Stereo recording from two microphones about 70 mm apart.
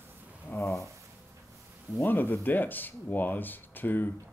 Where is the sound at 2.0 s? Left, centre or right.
Left.